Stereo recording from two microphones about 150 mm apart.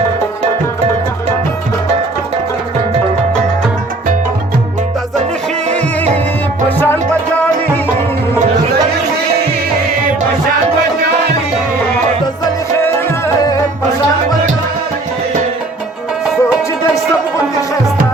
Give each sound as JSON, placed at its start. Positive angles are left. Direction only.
{"t": 6.7, "sound": "music", "side_deg": 15}
{"t": 12.7, "sound": "music", "side_deg": 15}
{"t": 16.2, "sound": "music", "side_deg": -5}